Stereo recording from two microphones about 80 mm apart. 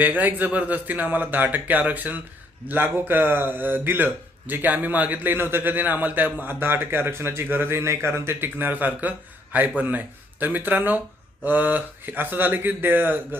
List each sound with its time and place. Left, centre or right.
0.0 s speech: right